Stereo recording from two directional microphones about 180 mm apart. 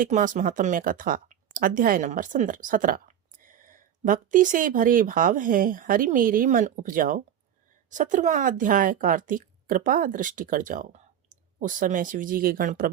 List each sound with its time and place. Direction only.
0.0 s a woman's voice: 45° right (ahead or behind)